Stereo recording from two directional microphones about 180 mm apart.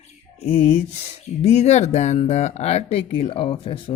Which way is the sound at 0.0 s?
35° left (ahead or behind).